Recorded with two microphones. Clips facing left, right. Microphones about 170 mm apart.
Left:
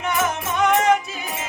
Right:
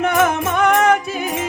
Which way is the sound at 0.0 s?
60° right (ahead or behind).